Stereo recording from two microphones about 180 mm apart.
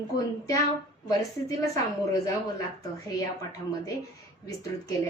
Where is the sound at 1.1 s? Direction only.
20° left (ahead or behind).